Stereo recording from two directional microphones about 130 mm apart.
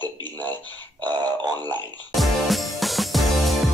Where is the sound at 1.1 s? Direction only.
30° right (ahead or behind).